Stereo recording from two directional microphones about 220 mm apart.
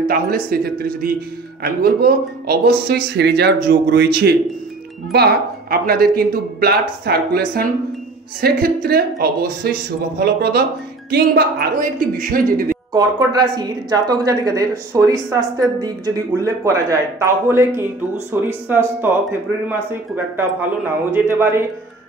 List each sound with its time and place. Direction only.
0.1 s a woman's voice: 45° right (ahead or behind)
12.9 s speech: 20° right (ahead or behind)
21.1 s speech: 10° right (ahead or behind)